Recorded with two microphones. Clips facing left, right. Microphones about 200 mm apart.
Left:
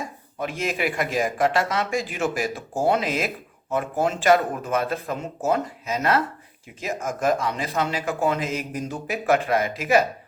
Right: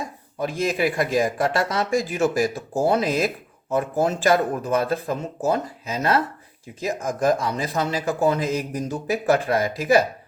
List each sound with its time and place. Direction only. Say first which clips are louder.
0.3 s speech: right 3 dB; 35° right (ahead or behind)